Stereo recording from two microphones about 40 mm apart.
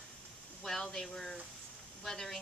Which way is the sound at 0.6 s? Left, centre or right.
Centre.